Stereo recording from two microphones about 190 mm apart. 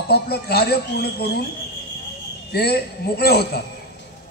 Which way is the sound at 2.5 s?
55° left (ahead or behind).